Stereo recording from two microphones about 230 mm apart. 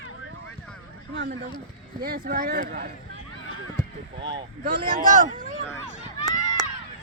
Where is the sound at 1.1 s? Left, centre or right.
Right.